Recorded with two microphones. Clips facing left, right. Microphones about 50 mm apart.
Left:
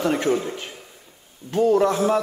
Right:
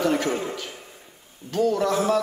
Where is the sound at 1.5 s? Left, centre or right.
Left.